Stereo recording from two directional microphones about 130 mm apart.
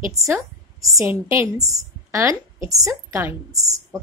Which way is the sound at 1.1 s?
20° right (ahead or behind).